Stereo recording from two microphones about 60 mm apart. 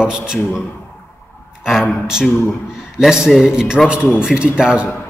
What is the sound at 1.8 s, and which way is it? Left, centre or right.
A man's voice, centre.